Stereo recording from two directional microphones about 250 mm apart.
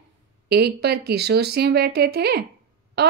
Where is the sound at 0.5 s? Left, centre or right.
Right.